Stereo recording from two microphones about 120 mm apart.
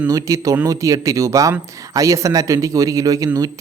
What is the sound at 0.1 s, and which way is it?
Speech, 30° right (ahead or behind).